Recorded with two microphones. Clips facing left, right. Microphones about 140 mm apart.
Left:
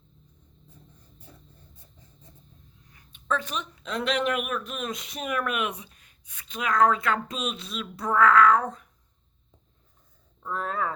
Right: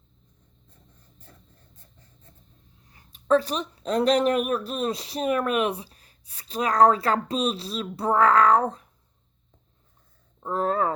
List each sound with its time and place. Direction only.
1.2 s writing: 10° left (ahead or behind)
2.9 s speech: 35° right (ahead or behind)
10.4 s speech: 35° right (ahead or behind)